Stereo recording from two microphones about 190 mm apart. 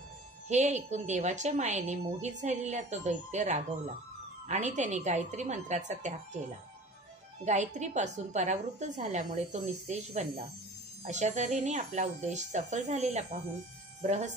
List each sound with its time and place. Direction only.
0.5 s a woman's voice: 40° right (ahead or behind)
7.4 s a woman's voice: 40° right (ahead or behind)